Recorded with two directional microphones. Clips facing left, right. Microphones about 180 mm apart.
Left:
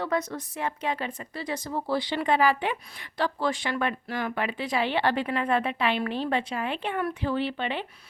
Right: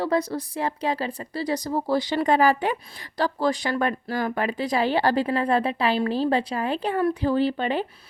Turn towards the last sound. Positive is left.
turn(degrees=-40)  # may be behind; listen again after turning